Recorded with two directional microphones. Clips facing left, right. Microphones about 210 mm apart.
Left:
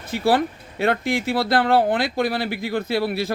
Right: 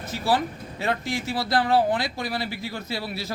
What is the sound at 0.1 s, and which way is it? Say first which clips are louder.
A man's voice: left 5 dB; 60° left (ahead or behind).